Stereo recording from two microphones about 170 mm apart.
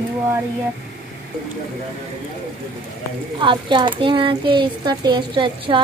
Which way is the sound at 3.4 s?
30° right (ahead or behind).